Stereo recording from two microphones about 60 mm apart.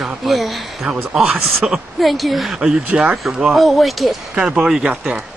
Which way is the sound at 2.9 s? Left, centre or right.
Right.